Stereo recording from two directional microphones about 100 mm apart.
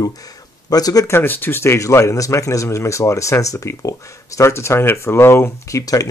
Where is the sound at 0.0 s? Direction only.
35° left (ahead or behind).